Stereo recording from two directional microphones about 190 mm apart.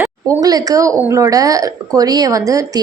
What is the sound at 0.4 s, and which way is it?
Speech, 20° right (ahead or behind).